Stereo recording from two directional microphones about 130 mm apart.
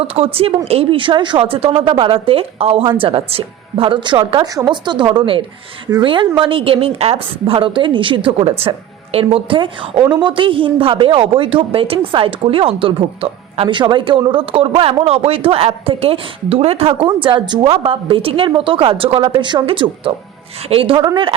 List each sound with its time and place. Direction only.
0.1 s a woman's voice: 50° right (ahead or behind)